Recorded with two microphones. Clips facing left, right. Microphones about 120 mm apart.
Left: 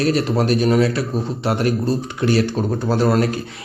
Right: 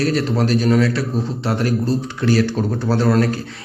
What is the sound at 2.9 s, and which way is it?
Speech, 15° left (ahead or behind).